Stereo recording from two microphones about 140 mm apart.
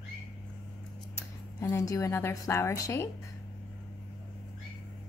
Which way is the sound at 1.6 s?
25° left (ahead or behind).